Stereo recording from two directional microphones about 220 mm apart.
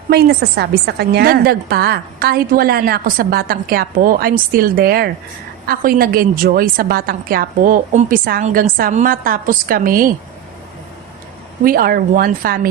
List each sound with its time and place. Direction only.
0.1 s a woman's voice: 45° right (ahead or behind)
11.6 s a woman's voice: 40° right (ahead or behind)